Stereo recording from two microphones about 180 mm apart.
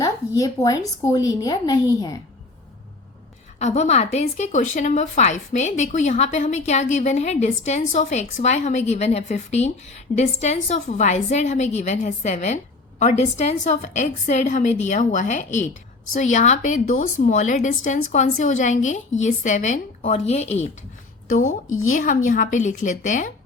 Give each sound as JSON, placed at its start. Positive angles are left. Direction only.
{"t": 0.0, "sound": "a woman's voice", "side_deg": 20}
{"t": 3.6, "sound": "a woman's voice", "side_deg": 40}